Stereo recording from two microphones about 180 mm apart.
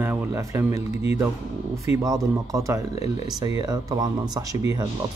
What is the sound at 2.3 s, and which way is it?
Speech, 20° right (ahead or behind).